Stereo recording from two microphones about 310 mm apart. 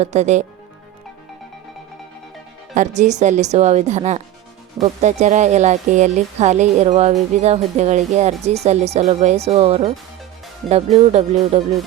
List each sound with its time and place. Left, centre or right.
0.0 s speech: right
2.7 s speech: right
11.1 s speech: right